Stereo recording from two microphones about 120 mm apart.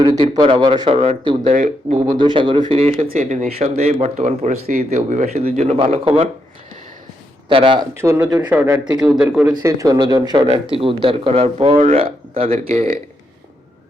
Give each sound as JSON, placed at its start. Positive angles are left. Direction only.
{"t": 0.0, "sound": "speech", "side_deg": -35}
{"t": 1.5, "sound": "speech", "side_deg": -90}
{"t": 2.1, "sound": "speech", "side_deg": -45}
{"t": 2.6, "sound": "speech", "side_deg": -55}
{"t": 7.4, "sound": "a man's voice", "side_deg": -45}
{"t": 7.9, "sound": "speech", "side_deg": -20}
{"t": 8.9, "sound": "a man's voice", "side_deg": -5}
{"t": 9.6, "sound": "speech", "side_deg": -30}
{"t": 12.5, "sound": "speech", "side_deg": -70}